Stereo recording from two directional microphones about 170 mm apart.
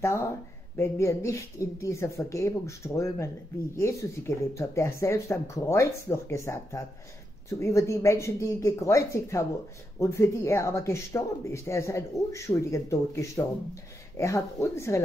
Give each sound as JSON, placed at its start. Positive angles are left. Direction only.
{"t": 0.0, "sound": "speech", "side_deg": 15}